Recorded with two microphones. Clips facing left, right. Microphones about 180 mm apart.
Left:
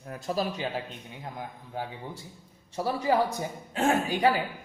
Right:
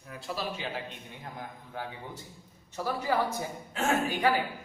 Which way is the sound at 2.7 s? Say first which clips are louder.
Left 4 dB; 35° left (ahead or behind).